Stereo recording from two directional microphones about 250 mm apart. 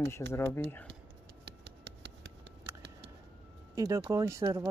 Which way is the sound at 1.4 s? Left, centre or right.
Right.